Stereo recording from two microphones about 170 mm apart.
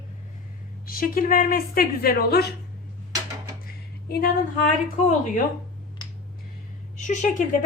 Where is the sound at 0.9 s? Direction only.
60° left (ahead or behind).